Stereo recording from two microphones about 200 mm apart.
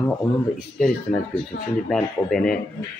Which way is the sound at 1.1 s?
45° left (ahead or behind).